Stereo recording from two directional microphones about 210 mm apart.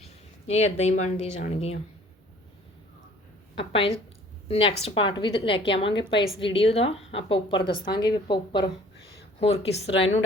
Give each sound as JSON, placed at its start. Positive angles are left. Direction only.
{"t": 0.0, "sound": "speech", "side_deg": 30}
{"t": 3.6, "sound": "a woman's voice", "side_deg": 25}